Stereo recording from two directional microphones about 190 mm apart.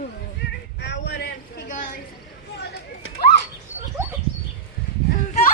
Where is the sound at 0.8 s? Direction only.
65° left (ahead or behind).